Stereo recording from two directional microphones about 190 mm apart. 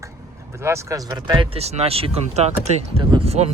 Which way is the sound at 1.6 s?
35° right (ahead or behind).